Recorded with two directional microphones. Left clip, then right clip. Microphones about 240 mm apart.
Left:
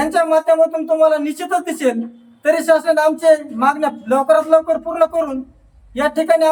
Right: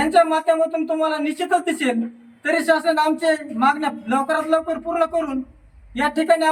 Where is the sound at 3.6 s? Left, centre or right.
Centre.